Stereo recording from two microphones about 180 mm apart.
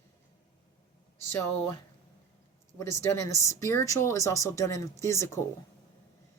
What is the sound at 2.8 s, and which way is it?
A woman's voice, 15° left (ahead or behind).